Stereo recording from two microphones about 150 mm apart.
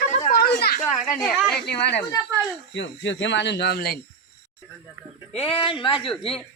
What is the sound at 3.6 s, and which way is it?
Speech, 90° left.